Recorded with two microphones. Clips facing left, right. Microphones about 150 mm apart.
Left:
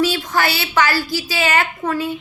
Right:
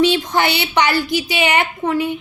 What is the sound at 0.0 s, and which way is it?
A woman's voice, 20° right (ahead or behind).